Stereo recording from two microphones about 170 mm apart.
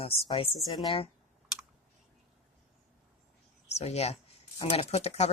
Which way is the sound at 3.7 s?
40° left (ahead or behind).